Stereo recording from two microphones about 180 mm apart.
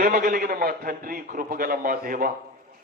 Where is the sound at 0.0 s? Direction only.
55° right (ahead or behind).